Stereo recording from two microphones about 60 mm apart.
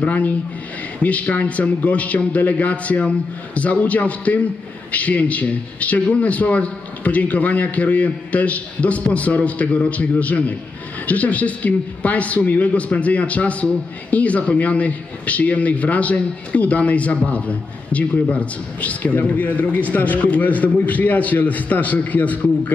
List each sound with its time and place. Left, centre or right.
0.0 s a man's voice: left